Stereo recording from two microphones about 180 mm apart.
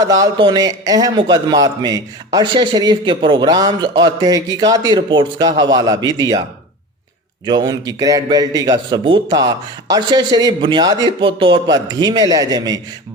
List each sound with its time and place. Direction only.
0.0 s a man's voice: 20° right (ahead or behind)
7.4 s a man's voice: 20° right (ahead or behind)